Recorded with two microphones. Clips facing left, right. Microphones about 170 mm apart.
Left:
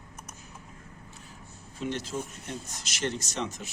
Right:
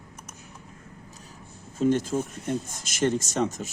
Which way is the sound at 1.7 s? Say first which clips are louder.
Right 10 dB; 45° right (ahead or behind).